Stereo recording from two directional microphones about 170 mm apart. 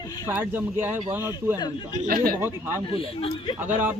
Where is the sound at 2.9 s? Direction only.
35° left (ahead or behind).